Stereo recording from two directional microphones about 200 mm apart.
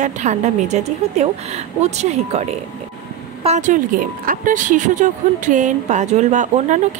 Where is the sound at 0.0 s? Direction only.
35° right (ahead or behind).